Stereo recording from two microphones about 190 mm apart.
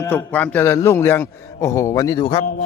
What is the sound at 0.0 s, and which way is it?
Music, 10° left (ahead or behind).